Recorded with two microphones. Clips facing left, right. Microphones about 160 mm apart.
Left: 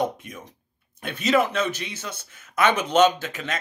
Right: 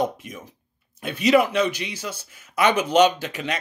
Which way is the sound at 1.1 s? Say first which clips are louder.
Right 3 dB; 10° right (ahead or behind).